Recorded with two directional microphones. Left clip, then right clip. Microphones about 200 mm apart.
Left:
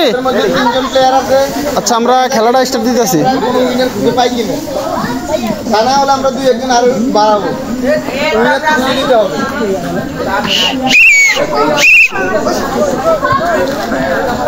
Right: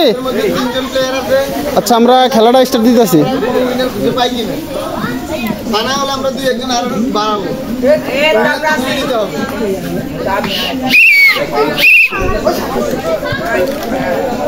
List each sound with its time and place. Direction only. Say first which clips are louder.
1.8 s a man's voice: right 2 dB; 35° right (ahead or behind)
10.5 s speech: left 3 dB; 35° right (ahead or behind)